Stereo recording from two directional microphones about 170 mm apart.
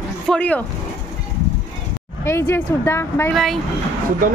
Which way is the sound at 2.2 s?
15° left (ahead or behind).